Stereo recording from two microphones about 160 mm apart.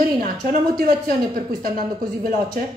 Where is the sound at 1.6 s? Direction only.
65° right (ahead or behind).